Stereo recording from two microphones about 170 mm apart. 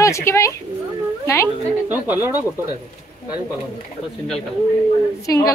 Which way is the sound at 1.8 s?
10° right (ahead or behind).